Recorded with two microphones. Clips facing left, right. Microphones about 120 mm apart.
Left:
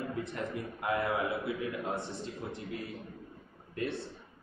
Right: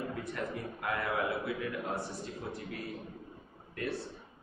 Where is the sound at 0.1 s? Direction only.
25° left (ahead or behind).